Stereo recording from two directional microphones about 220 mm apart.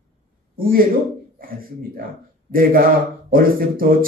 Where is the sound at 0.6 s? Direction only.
40° right (ahead or behind).